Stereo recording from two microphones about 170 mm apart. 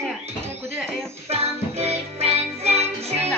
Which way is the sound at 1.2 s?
40° right (ahead or behind).